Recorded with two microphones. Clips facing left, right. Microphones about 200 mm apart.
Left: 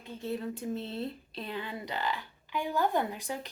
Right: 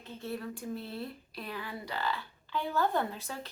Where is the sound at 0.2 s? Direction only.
20° left (ahead or behind).